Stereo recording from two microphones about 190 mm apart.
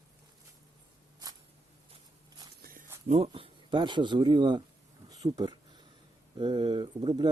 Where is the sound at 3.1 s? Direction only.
35° right (ahead or behind).